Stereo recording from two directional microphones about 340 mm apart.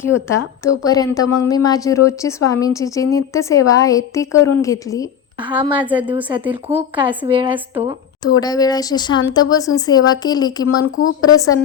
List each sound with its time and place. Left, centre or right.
0.6 s speech: centre
5.4 s a woman's voice: centre
8.2 s speech: centre
10.7 s speech: left